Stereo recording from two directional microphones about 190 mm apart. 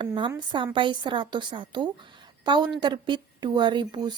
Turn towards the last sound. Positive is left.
turn(degrees=-25)  # may be behind; listen again after turning